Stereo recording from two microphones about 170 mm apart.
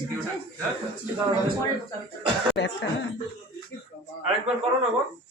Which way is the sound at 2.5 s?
90° left.